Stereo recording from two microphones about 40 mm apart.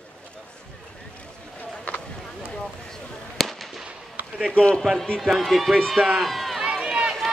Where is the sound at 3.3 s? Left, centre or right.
Centre.